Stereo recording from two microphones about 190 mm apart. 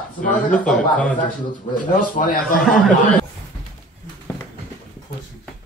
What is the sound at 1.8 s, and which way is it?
Speech, 45° left (ahead or behind).